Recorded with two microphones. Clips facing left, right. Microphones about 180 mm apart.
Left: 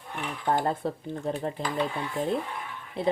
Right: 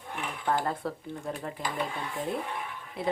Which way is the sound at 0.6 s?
25° left (ahead or behind).